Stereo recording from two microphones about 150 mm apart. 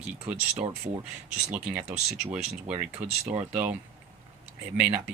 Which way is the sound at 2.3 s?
5° right (ahead or behind).